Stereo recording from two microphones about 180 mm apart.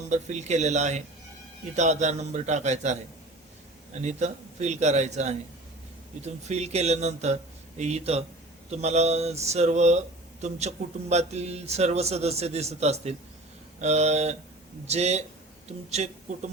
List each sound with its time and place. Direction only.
0.1 s speech: 40° right (ahead or behind)